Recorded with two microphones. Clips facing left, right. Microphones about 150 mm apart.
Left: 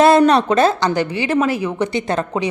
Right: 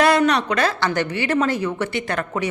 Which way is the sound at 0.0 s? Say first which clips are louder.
Left 5 dB; 30° left (ahead or behind).